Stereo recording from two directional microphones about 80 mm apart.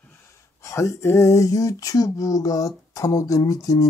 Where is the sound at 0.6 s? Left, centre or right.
Left.